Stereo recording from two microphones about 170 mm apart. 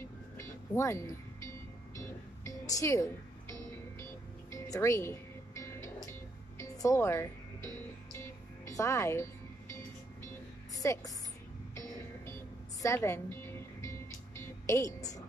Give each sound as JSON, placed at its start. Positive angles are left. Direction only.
{"t": 0.4, "sound": "music", "side_deg": 15}
{"t": 12.8, "sound": "music", "side_deg": 15}